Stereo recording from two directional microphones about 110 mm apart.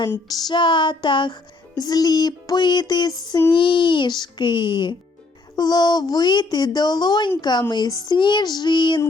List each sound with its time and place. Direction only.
0.3 s music: 40° left (ahead or behind)
3.5 s speech: 50° left (ahead or behind)
5.5 s music: 40° left (ahead or behind)
7.7 s speech: 40° left (ahead or behind)